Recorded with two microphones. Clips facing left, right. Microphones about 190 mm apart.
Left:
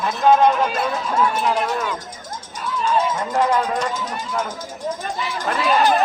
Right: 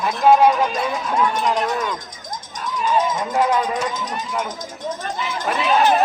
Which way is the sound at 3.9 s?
10° left (ahead or behind).